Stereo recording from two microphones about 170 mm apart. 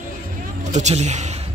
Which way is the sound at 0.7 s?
40° right (ahead or behind).